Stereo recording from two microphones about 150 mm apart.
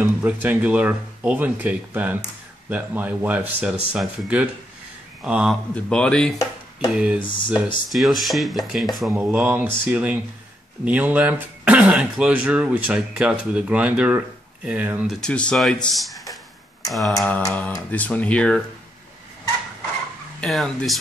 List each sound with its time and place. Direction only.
0.0 s speech: 10° right (ahead or behind)
5.8 s speech: 5° left (ahead or behind)
6.9 s speech: 5° right (ahead or behind)
7.2 s speech: 35° left (ahead or behind)
7.9 s speech: centre (ahead or behind)
15.1 s speech: 5° left (ahead or behind)
16.8 s a sound: centre (ahead or behind)
17.5 s speech: 10° left (ahead or behind)
20.3 s speech: 5° left (ahead or behind)